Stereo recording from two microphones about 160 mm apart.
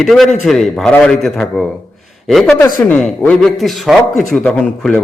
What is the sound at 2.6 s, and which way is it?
A man's voice, 10° left (ahead or behind).